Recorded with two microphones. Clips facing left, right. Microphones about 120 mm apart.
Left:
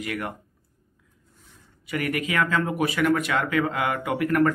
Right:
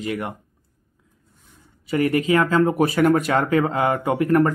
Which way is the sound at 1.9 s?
30° right (ahead or behind).